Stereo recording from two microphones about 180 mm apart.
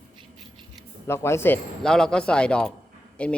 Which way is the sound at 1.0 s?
15° left (ahead or behind).